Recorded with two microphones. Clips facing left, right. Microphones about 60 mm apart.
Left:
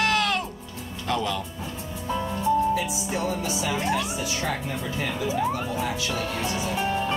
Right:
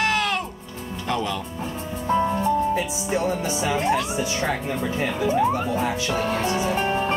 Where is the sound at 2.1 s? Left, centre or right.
Right.